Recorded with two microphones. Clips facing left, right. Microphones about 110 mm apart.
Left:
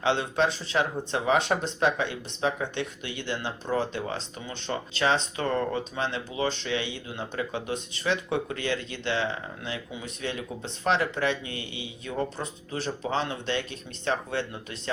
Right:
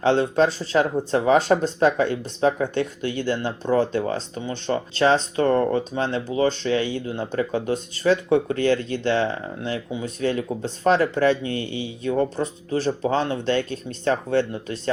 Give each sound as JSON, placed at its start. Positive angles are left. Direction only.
{"t": 0.0, "sound": "speech", "side_deg": -40}